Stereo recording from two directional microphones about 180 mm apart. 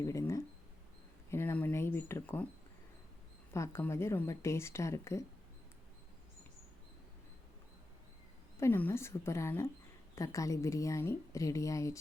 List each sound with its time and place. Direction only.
0.0 s mouse: 15° left (ahead or behind)
1.3 s a sound: 15° left (ahead or behind)
3.5 s speech: 15° left (ahead or behind)
8.5 s speech: 15° left (ahead or behind)